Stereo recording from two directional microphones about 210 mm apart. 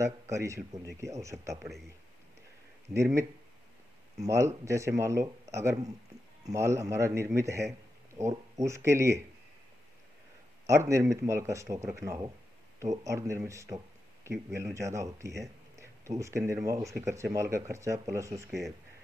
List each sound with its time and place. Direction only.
0.0 s speech: 15° right (ahead or behind)
4.2 s speech: 15° right (ahead or behind)
10.7 s speech: 15° right (ahead or behind)